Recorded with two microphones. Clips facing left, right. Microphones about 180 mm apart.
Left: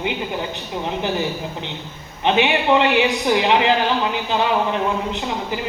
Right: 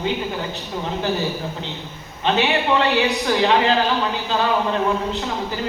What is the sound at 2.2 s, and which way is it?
A man's voice, 15° left (ahead or behind).